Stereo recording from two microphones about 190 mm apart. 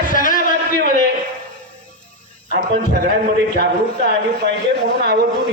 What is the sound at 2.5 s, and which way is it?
Speech, 55° right (ahead or behind).